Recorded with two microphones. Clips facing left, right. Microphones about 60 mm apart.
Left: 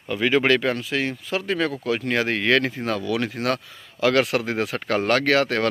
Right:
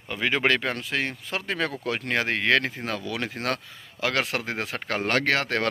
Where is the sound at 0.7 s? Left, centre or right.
Right.